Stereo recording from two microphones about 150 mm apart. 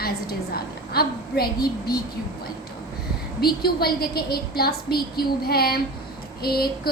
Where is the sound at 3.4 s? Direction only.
90° left.